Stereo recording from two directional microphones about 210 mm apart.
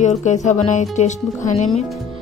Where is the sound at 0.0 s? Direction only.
35° left (ahead or behind).